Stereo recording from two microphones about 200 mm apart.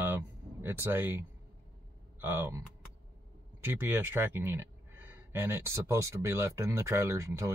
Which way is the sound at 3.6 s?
10° right (ahead or behind).